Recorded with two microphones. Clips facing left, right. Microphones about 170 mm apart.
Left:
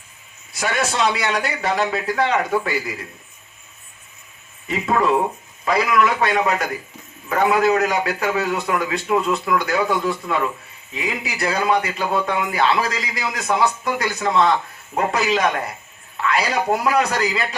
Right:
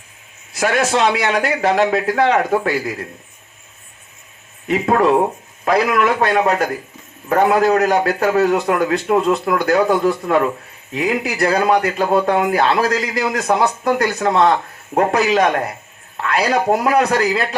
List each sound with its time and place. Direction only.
0.5 s a man's voice: 55° right (ahead or behind)
4.7 s a man's voice: 60° right (ahead or behind)
6.0 s a man's voice: 45° right (ahead or behind)